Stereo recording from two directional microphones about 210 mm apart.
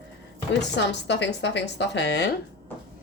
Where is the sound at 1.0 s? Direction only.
55° left (ahead or behind).